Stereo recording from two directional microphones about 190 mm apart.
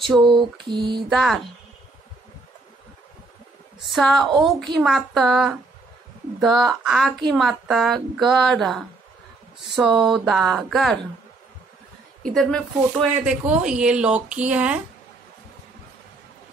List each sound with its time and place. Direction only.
0.0 s speech: centre (ahead or behind)
0.7 s mantra: 25° right (ahead or behind)
1.0 s speech: centre (ahead or behind)
3.9 s speech: centre (ahead or behind)
9.8 s mantra: 25° right (ahead or behind)
10.1 s speech: centre (ahead or behind)
12.4 s speech: 5° left (ahead or behind)